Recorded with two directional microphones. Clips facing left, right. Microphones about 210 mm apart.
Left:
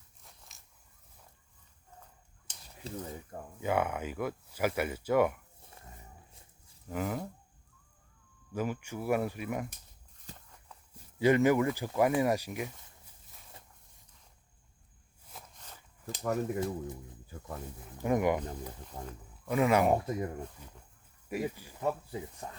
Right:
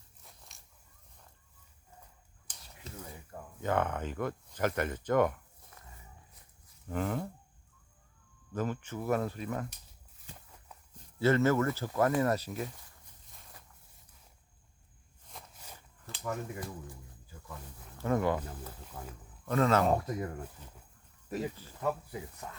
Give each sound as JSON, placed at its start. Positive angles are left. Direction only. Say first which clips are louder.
{"t": 0.2, "sound": "a sound", "louder": "right 1 dB", "side_deg": 0}
{"t": 2.8, "sound": "a sound", "louder": "left 7 dB", "side_deg": 30}
{"t": 3.6, "sound": "speech", "louder": "even", "side_deg": 10}
{"t": 6.9, "sound": "speech", "louder": "right 1 dB", "side_deg": 5}
{"t": 8.5, "sound": "speech", "louder": "even", "side_deg": 10}
{"t": 10.9, "sound": "speech", "louder": "left 2 dB", "side_deg": 15}
{"t": 15.5, "sound": "a sound", "louder": "right 1 dB", "side_deg": -10}
{"t": 16.1, "sound": "speech", "louder": "left 5 dB", "side_deg": 40}
{"t": 16.6, "sound": "speech", "louder": "left 8 dB", "side_deg": 20}
{"t": 18.9, "sound": "speech", "louder": "left 2 dB", "side_deg": 25}
{"t": 19.5, "sound": "speech", "louder": "left 1 dB", "side_deg": 10}
{"t": 22.4, "sound": "speech", "louder": "left 2 dB", "side_deg": 35}